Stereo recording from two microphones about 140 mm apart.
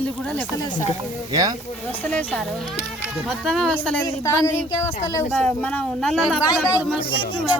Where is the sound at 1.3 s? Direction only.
25° right (ahead or behind).